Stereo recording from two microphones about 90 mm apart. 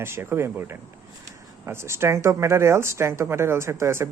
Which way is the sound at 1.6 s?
30° right (ahead or behind).